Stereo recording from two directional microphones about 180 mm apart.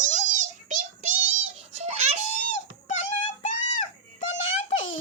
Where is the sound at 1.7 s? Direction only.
35° right (ahead or behind).